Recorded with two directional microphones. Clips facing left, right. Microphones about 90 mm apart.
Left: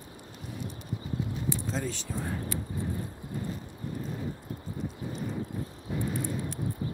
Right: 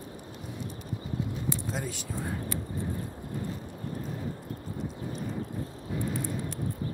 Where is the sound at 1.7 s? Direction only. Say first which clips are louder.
Left 2 dB; 10° right (ahead or behind).